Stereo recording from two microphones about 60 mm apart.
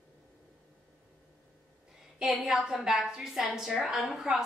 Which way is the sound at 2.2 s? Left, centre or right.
Centre.